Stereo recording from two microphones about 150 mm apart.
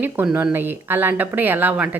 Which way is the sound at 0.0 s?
10° right (ahead or behind).